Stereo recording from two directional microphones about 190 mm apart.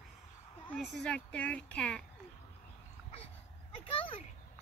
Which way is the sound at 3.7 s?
30° left (ahead or behind).